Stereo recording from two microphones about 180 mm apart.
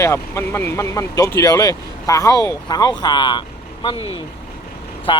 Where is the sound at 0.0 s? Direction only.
15° left (ahead or behind).